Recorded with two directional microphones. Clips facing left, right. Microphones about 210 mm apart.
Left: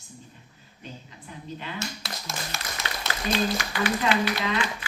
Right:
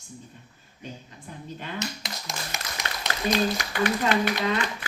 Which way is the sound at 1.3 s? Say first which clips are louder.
Right 2 dB; 45° right (ahead or behind).